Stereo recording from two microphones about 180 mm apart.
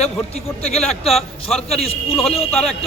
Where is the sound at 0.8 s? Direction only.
Centre (ahead or behind).